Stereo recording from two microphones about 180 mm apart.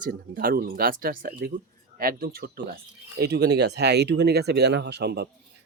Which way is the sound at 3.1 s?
65° right (ahead or behind).